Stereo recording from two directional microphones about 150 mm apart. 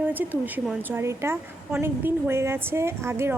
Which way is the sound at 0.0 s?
10° right (ahead or behind).